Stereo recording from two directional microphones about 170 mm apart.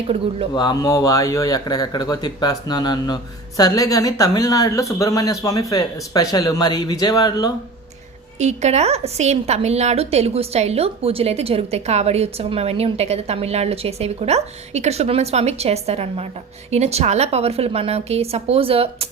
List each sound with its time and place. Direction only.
0.5 s speech: 25° left (ahead or behind)
8.4 s a woman's voice: 40° right (ahead or behind)